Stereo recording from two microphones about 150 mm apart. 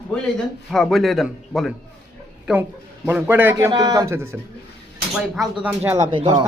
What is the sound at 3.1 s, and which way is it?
Speech, 15° right (ahead or behind).